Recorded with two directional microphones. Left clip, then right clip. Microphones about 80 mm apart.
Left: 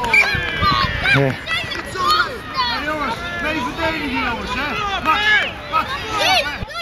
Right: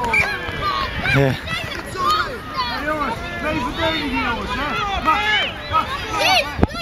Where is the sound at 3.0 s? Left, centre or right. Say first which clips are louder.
Left 2 dB; left.